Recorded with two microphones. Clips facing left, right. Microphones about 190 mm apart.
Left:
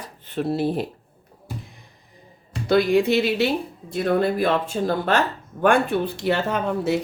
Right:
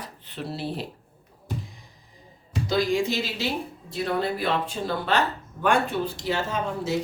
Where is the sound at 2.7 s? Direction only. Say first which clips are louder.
Left 6 dB; 60° left (ahead or behind).